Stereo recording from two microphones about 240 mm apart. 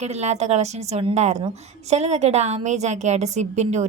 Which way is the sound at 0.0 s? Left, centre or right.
Right.